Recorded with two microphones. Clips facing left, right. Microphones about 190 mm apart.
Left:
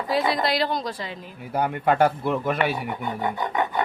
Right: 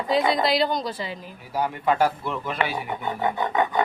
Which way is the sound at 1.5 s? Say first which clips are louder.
Left 2 dB; 60° left (ahead or behind).